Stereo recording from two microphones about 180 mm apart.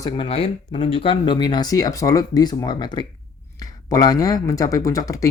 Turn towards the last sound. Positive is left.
turn(degrees=20)  # may be behind; listen again after turning